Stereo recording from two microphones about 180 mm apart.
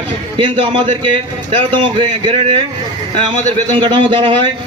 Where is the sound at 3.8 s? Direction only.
25° right (ahead or behind).